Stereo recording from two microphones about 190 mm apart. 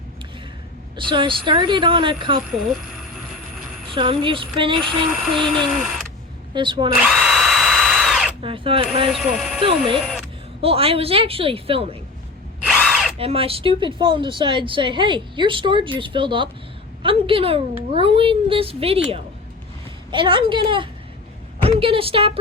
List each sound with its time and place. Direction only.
0.9 s speech: 25° right (ahead or behind)
3.9 s speech: 25° right (ahead or behind)
5.2 s speech: centre (ahead or behind)
6.5 s speech: 25° right (ahead or behind)
7.0 s drill: centre (ahead or behind)
8.4 s speech: 30° right (ahead or behind)
9.0 s speech: centre (ahead or behind)
10.6 s speech: 30° right (ahead or behind)
12.6 s drill: centre (ahead or behind)
13.1 s speech: 30° right (ahead or behind)
20.1 s a woman's voice: 25° right (ahead or behind)